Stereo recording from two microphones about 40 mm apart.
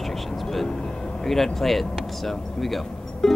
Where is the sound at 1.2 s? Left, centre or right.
Centre.